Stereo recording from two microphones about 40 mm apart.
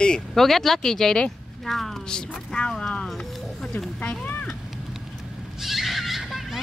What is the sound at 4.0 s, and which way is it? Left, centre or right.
Speech, left.